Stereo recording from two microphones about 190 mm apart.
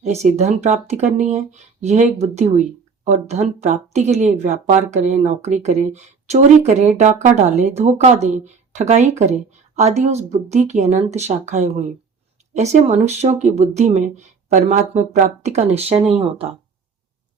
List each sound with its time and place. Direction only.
0.0 s speech: 35° right (ahead or behind)